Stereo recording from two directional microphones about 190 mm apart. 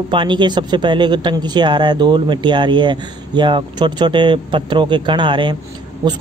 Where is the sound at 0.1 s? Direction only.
25° right (ahead or behind).